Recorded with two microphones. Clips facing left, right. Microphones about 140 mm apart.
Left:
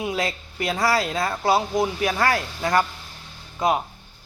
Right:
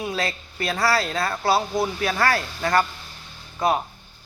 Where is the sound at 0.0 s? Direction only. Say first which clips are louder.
Left 1 dB; 20° left (ahead or behind).